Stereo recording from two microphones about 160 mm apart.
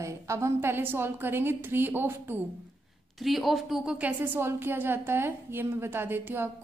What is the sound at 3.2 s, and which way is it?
A woman's voice, centre (ahead or behind).